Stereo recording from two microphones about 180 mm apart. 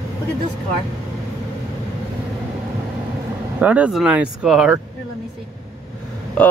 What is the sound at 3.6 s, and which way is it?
Speech, 10° right (ahead or behind).